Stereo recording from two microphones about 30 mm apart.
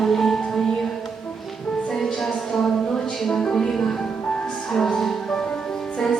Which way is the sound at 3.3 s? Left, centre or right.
Centre.